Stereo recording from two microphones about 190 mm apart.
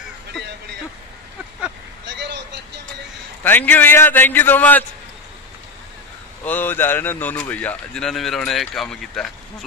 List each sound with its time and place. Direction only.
2.0 s vehicle: 65° right (ahead or behind)
3.4 s speech: 10° left (ahead or behind)
6.4 s speech: 10° left (ahead or behind)